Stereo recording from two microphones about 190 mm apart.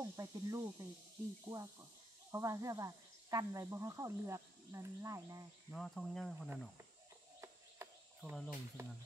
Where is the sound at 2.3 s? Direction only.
15° right (ahead or behind).